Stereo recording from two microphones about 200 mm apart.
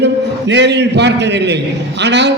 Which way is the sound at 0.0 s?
60° right (ahead or behind).